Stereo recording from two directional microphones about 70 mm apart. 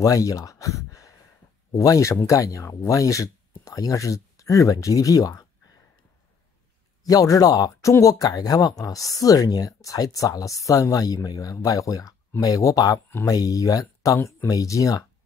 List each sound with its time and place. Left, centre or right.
0.0 s a sound: left
1.7 s speech: left
7.1 s speech: left